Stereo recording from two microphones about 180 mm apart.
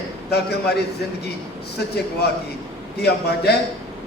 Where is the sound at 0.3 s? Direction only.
65° left (ahead or behind).